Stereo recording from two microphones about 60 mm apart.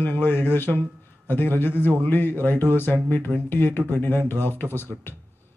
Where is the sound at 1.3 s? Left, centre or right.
Left.